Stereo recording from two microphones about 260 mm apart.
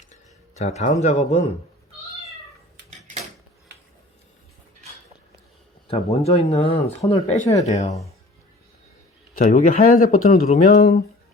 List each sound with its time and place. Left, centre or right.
0.1 s a sound: left
1.0 s speech: left
5.9 s speech: left
9.3 s speech: left